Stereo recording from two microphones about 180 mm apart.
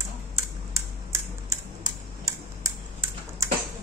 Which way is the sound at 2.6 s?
15° right (ahead or behind).